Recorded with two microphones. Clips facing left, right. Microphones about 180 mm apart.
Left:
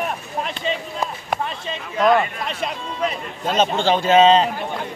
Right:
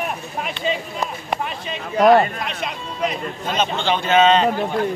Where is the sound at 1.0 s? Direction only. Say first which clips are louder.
Even; 5° right (ahead or behind).